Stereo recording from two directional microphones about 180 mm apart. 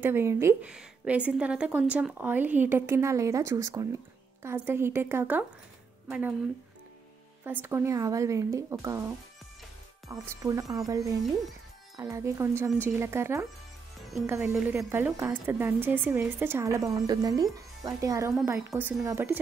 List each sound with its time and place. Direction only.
0.0 s a woman's voice: 15° right (ahead or behind)
7.4 s a woman's voice: 10° right (ahead or behind)
10.0 s a woman's voice: 20° right (ahead or behind)